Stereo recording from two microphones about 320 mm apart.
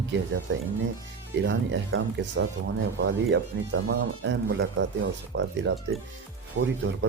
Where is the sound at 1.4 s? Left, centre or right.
Right.